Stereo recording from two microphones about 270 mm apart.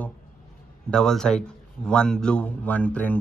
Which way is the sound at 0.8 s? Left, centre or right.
Centre.